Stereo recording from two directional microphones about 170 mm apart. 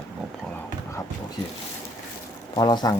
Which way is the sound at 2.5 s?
25° left (ahead or behind).